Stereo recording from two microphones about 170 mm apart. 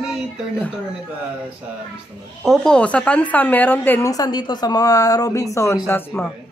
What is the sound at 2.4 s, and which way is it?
A woman's voice, 5° left (ahead or behind).